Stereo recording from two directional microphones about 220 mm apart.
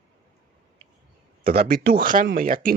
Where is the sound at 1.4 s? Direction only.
40° right (ahead or behind).